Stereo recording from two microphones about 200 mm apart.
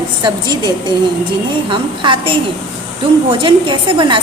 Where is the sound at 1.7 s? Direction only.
25° right (ahead or behind).